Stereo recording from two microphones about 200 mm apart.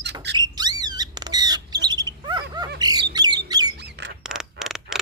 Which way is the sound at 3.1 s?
20° right (ahead or behind).